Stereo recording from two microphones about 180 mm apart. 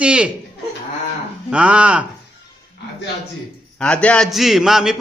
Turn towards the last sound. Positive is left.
turn(degrees=0)  # may be behind; listen again after turning